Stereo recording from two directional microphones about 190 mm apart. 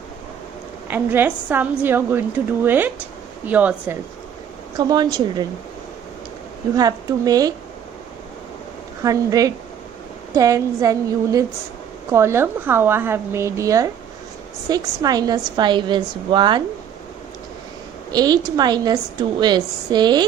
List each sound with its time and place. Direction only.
0.9 s a woman's voice: 10° right (ahead or behind)
4.8 s a woman's voice: 20° right (ahead or behind)
6.7 s a woman's voice: 20° right (ahead or behind)
9.0 s a woman's voice: 20° right (ahead or behind)
18.1 s a woman's voice: 20° right (ahead or behind)